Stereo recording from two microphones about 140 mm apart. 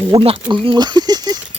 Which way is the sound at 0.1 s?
35° right (ahead or behind).